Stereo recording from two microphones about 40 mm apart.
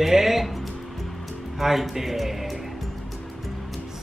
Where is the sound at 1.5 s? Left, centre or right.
Centre.